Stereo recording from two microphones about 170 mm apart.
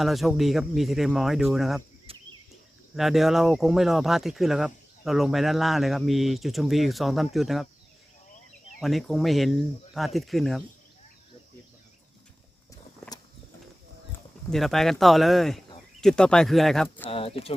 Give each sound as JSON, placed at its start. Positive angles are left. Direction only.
{"t": 0.0, "sound": "speech", "side_deg": 0}
{"t": 2.1, "sound": "cricket", "side_deg": -35}
{"t": 2.9, "sound": "speech", "side_deg": 0}
{"t": 8.8, "sound": "speech", "side_deg": 0}
{"t": 14.5, "sound": "speech", "side_deg": 0}
{"t": 17.1, "sound": "speech", "side_deg": 35}